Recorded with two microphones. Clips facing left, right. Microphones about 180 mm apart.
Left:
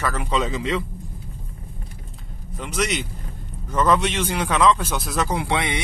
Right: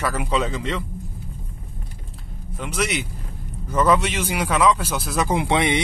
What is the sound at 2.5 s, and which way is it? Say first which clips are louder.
Speech: even; centre (ahead or behind).